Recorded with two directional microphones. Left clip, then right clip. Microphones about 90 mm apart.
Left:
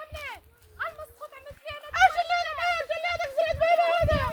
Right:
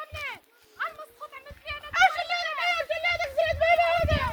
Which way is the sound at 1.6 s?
55° left (ahead or behind).